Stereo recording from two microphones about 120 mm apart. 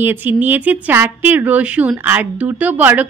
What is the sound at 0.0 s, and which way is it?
Speech, 15° right (ahead or behind).